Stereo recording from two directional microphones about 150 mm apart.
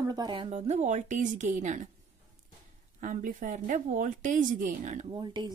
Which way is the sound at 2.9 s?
60° right (ahead or behind).